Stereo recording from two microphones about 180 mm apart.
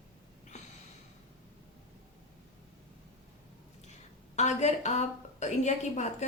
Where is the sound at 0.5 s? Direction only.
40° left (ahead or behind).